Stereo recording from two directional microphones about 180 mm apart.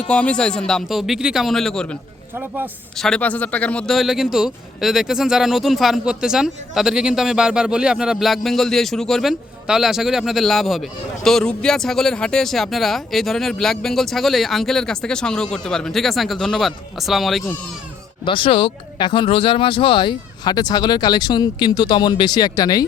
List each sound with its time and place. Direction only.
0.1 s a man's voice: 5° left (ahead or behind)
2.3 s speech: 10° right (ahead or behind)
3.0 s a man's voice: 5° left (ahead or behind)
18.3 s speech: 30° left (ahead or behind)